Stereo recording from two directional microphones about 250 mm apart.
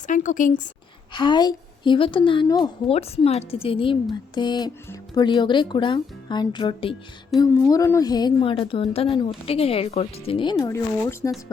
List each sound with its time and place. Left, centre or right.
0.1 s a woman's voice: left
1.1 s a woman's voice: centre